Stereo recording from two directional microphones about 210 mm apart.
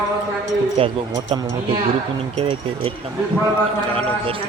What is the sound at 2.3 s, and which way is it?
Speech, 25° right (ahead or behind).